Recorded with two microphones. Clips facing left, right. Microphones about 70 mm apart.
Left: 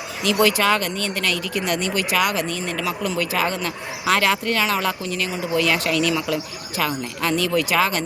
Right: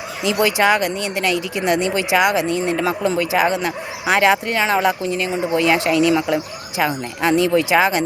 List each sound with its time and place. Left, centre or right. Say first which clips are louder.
0.2 s speech: right 2 dB; centre